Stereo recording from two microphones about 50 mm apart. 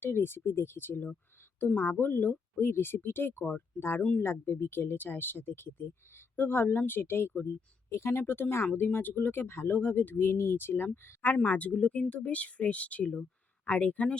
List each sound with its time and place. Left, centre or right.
0.0 s speech: left
7.9 s speech: left
8.3 s speech: left
11.4 s speech: left